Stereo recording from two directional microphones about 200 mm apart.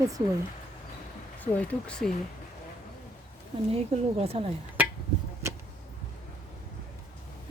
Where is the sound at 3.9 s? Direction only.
30° right (ahead or behind).